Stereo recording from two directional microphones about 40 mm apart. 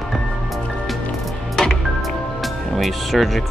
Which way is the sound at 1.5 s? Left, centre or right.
Centre.